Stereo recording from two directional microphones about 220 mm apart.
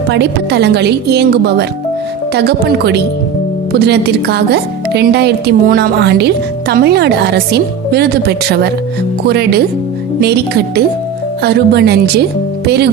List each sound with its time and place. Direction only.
0.1 s speech: 50° right (ahead or behind)